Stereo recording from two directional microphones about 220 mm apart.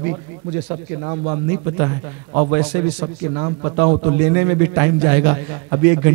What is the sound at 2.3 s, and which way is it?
A man's voice, 20° right (ahead or behind).